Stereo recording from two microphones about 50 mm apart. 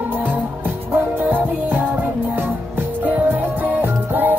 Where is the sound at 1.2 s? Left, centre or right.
Right.